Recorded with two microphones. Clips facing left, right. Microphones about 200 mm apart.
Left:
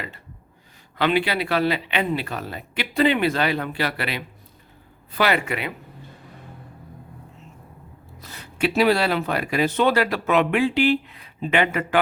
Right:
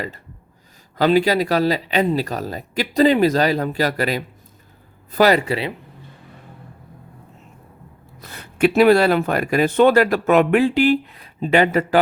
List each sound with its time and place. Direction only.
0.9 s speech: 40° right (ahead or behind)
8.2 s speech: 55° right (ahead or behind); by 11.9 s 40° right (ahead or behind)